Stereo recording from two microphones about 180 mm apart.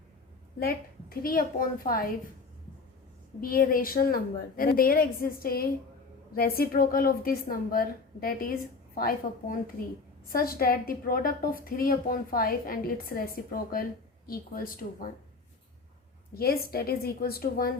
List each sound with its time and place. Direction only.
1.2 s a woman's voice: 50° left (ahead or behind)
3.4 s a woman's voice: 55° left (ahead or behind)
16.3 s a woman's voice: 60° left (ahead or behind)